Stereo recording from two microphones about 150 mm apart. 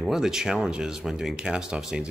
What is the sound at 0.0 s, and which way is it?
Speech, 5° right (ahead or behind).